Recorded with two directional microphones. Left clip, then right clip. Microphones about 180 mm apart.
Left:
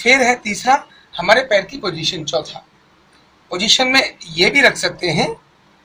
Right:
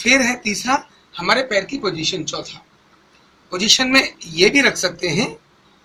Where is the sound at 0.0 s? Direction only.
55° left (ahead or behind).